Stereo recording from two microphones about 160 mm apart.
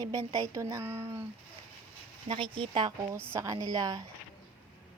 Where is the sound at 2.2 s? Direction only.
30° right (ahead or behind).